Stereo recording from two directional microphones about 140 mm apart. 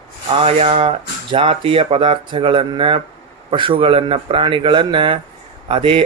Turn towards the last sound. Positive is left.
turn(degrees=-40)  # may be behind; listen again after turning